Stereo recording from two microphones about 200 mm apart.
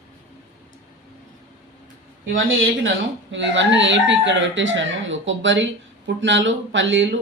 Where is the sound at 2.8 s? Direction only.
65° right (ahead or behind).